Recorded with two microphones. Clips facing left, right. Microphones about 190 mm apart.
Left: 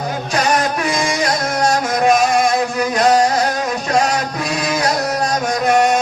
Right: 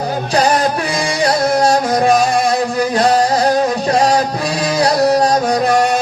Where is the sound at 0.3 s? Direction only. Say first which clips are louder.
Right 3 dB; 35° right (ahead or behind).